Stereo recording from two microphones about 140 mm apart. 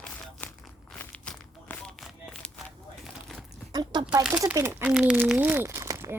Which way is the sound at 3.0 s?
5° left (ahead or behind).